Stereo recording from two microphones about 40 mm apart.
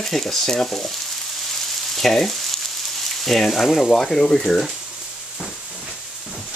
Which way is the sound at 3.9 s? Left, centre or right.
Centre.